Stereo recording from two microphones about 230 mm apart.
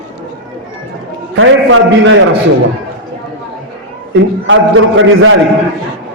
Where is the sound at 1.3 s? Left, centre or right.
Right.